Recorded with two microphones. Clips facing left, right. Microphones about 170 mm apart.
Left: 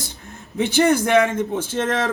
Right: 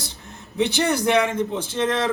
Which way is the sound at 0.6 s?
50° left (ahead or behind).